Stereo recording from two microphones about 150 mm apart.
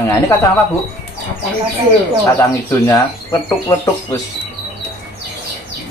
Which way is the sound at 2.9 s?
15° left (ahead or behind).